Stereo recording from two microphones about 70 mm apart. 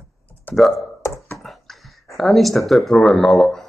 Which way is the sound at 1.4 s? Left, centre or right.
Centre.